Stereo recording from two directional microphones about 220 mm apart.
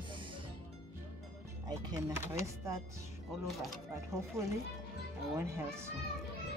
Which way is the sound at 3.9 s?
15° right (ahead or behind).